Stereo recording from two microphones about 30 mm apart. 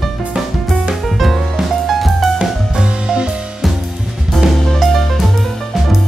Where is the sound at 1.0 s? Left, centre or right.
Centre.